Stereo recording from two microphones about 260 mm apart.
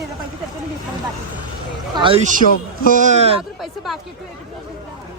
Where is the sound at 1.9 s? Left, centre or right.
Centre.